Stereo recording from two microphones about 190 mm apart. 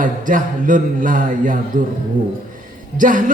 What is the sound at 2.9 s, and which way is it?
Speech, 45° right (ahead or behind).